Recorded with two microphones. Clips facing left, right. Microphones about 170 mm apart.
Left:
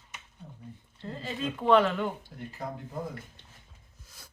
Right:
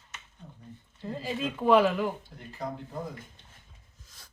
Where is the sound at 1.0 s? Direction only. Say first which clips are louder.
Right 2 dB; 5° right (ahead or behind).